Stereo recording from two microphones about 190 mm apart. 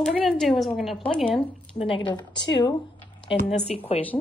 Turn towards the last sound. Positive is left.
turn(degrees=30)  # may be behind; listen again after turning